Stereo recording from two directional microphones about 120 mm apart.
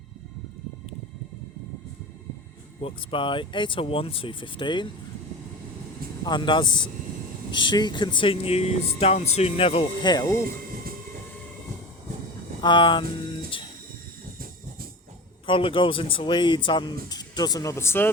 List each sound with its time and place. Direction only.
2.8 s speech: 45° left (ahead or behind)
6.2 s speech: 40° left (ahead or behind); by 9.8 s 55° left (ahead or behind)
10.0 s speech: 35° left (ahead or behind)
12.6 s speech: 40° left (ahead or behind)
15.4 s speech: 45° left (ahead or behind); by 18.1 s 20° left (ahead or behind)